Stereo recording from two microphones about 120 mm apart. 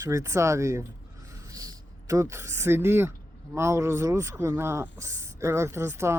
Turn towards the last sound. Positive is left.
turn(degrees=-20)  # may be behind; listen again after turning